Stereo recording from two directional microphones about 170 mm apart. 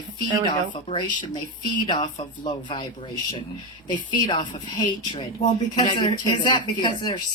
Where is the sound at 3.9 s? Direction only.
25° left (ahead or behind).